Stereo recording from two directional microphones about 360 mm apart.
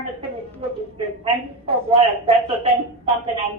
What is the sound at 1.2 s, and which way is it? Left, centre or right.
A woman's voice, centre.